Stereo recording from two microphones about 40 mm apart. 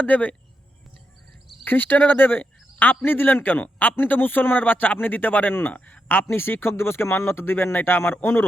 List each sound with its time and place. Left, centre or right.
0.0 s speech: left
1.6 s speech: left
2.4 s a sound: left
3.0 s a man's voice: left
5.7 s speech: left
6.1 s speech: left